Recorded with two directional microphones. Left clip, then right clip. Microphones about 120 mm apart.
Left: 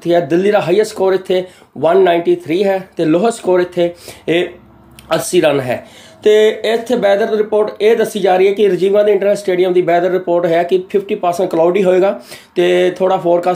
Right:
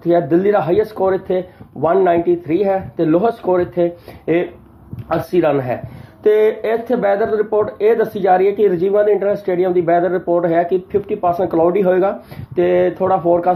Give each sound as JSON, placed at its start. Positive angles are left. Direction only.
{"t": 0.0, "sound": "speech", "side_deg": 35}